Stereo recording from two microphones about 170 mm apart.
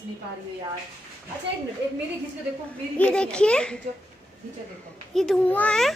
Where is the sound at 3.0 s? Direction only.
5° left (ahead or behind).